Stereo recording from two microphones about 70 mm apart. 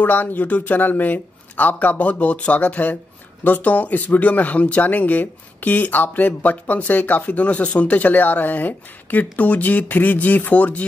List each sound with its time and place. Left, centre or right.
0.0 s speech: left